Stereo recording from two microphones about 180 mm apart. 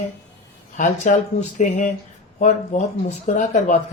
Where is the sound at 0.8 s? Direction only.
45° left (ahead or behind).